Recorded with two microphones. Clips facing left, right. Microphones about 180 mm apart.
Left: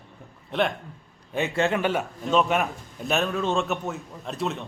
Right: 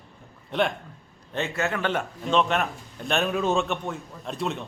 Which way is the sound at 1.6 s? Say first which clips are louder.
Left 5 dB; 25° left (ahead or behind).